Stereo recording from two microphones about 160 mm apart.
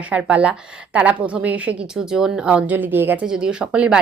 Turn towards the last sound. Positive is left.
turn(degrees=-5)  # may be behind; listen again after turning